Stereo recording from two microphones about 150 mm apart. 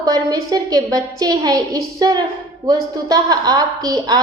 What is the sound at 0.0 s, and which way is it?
A woman's voice, 25° right (ahead or behind).